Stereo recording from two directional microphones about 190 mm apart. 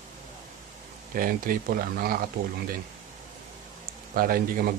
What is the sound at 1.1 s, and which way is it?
Speech, 45° right (ahead or behind).